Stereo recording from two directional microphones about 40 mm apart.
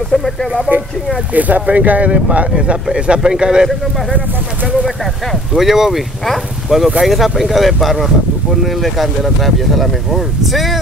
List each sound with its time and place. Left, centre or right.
0.1 s speech: centre
1.3 s speech: right; by 3.6 s centre
5.5 s speech: centre